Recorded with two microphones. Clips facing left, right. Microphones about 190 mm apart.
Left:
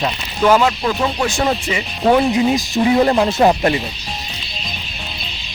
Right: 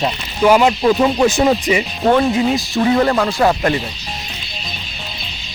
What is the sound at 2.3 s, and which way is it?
Speech, 20° left (ahead or behind).